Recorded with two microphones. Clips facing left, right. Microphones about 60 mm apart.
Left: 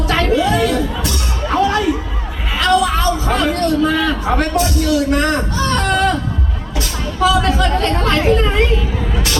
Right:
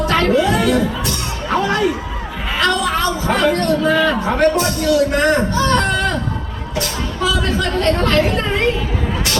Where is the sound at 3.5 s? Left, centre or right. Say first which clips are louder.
Even; centre.